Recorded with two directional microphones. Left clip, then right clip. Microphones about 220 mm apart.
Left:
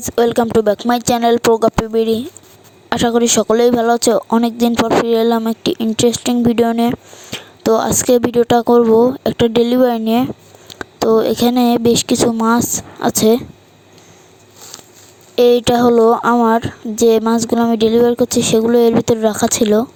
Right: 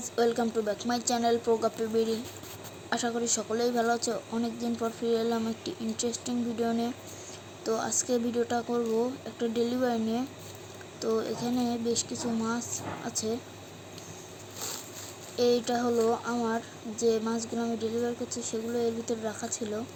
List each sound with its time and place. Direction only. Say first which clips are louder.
0.2 s speech: left 14 dB; 45° left (ahead or behind)
7.3 s a sound: left 17 dB; 45° left (ahead or behind)
8.0 s speech: left 17 dB; 45° left (ahead or behind)
15.4 s speech: left 16 dB; 45° left (ahead or behind)